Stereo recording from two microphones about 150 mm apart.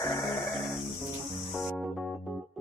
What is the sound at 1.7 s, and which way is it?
Music, centre (ahead or behind).